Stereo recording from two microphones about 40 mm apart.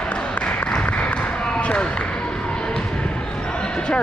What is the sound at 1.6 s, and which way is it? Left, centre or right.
Basketball bounce, left.